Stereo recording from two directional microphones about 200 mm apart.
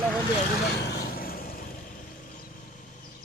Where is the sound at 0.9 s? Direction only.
55° left (ahead or behind).